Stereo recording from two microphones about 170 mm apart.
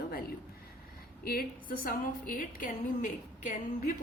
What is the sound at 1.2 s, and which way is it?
A woman's voice, 60° left (ahead or behind).